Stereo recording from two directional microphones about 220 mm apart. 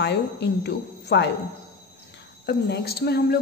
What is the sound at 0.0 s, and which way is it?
A woman's voice, 50° left (ahead or behind).